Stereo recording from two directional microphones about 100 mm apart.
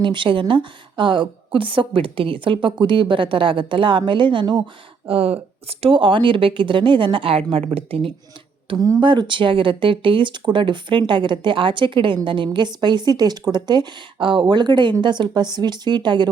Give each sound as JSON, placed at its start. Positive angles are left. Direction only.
{"t": 0.0, "sound": "a woman's voice", "side_deg": -55}
{"t": 5.0, "sound": "speech", "side_deg": -70}
{"t": 5.8, "sound": "a woman's voice", "side_deg": -60}
{"t": 8.7, "sound": "a woman's voice", "side_deg": -45}